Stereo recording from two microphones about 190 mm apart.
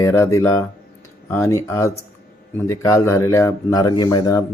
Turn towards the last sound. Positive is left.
turn(degrees=20)  # may be behind; listen again after turning